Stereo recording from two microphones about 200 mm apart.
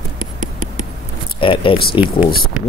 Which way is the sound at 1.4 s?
25° left (ahead or behind).